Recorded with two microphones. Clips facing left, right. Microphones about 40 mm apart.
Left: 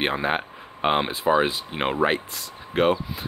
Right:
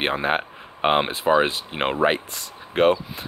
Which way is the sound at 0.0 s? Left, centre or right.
Centre.